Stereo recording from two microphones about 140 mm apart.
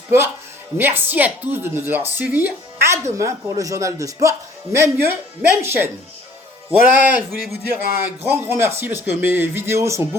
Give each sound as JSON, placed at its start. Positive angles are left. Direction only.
{"t": 0.8, "sound": "speech", "side_deg": -15}